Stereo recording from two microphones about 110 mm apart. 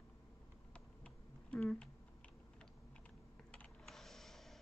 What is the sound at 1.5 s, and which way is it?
Speech, 10° left (ahead or behind).